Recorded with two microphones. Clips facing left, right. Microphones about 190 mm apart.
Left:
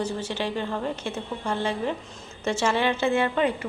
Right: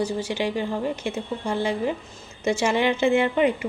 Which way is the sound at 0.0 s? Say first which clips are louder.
Right 3 dB; 10° right (ahead or behind).